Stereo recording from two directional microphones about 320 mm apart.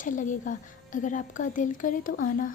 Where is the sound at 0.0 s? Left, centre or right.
Left.